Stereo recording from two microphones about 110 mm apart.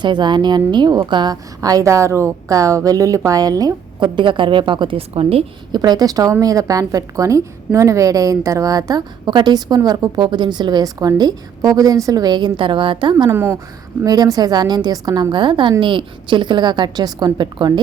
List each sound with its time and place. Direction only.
0.0 s a woman's voice: 45° right (ahead or behind)
4.0 s a woman's voice: 45° right (ahead or behind)
5.7 s a woman's voice: 40° right (ahead or behind)
13.3 s a woman's voice: 20° right (ahead or behind)
14.0 s a woman's voice: 35° right (ahead or behind)